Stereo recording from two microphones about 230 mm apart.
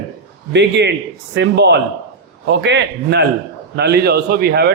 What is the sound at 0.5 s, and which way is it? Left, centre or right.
A man's voice, right.